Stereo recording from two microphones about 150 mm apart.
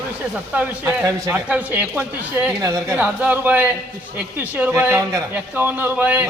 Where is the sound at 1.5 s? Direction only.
10° right (ahead or behind).